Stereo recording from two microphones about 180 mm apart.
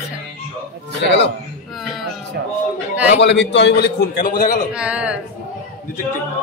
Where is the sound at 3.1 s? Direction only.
75° left (ahead or behind); by 4.6 s 50° left (ahead or behind).